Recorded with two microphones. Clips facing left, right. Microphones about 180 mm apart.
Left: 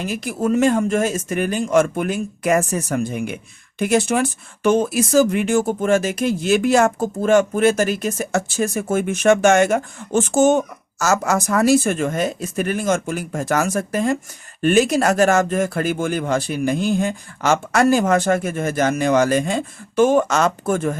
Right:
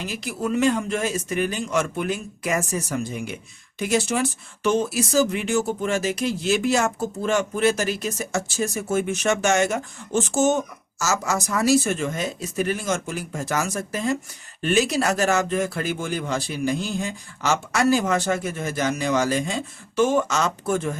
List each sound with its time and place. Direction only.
0.0 s speech: 50° left (ahead or behind)